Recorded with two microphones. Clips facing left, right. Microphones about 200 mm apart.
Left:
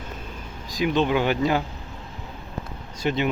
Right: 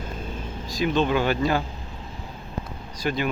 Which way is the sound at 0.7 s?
15° left (ahead or behind).